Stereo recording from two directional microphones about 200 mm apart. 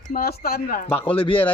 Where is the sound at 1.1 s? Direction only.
25° left (ahead or behind).